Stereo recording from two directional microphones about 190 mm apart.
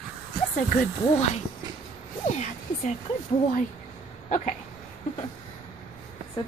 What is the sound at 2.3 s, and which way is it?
Speech, 40° left (ahead or behind).